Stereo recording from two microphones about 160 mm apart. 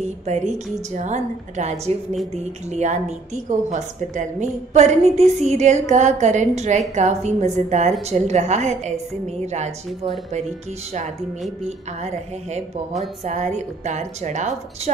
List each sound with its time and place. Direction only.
0.0 s a woman's voice: 45° right (ahead or behind)
13.2 s a woman's voice: 45° right (ahead or behind)